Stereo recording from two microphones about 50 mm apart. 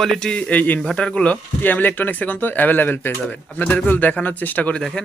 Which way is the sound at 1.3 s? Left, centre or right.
Left.